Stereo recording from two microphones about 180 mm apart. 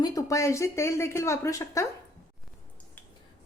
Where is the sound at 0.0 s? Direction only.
20° left (ahead or behind).